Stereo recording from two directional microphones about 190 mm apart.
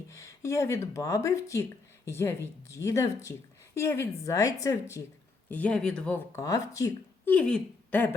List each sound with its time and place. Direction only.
0.1 s speech: 15° left (ahead or behind)